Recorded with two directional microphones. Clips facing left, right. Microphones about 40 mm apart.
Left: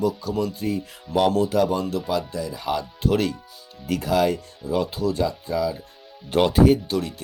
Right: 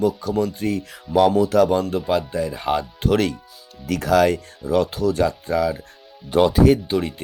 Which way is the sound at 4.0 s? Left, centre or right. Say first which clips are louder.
Right 5 dB; right.